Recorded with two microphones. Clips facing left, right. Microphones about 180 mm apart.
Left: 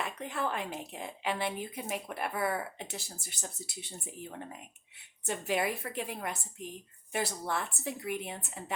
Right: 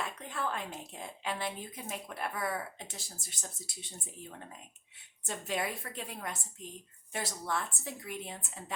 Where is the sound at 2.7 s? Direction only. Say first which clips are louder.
Left 5 dB; 65° left (ahead or behind).